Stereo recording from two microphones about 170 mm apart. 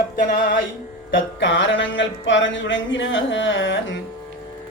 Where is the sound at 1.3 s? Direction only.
90° left.